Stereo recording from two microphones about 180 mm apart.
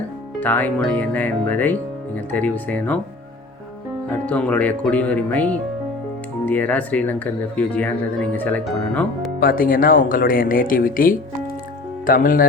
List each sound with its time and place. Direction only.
0.3 s speech: 10° left (ahead or behind)
4.1 s speech: 5° left (ahead or behind)
9.4 s speech: 50° left (ahead or behind)